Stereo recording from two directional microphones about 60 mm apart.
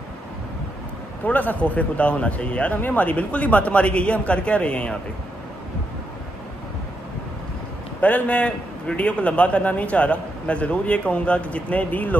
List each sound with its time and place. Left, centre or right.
1.2 s a man's voice: left
8.0 s a man's voice: left